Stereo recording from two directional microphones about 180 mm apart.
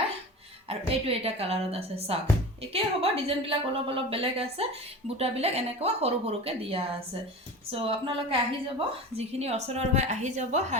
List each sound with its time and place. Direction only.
0.7 s a woman's voice: 35° right (ahead or behind)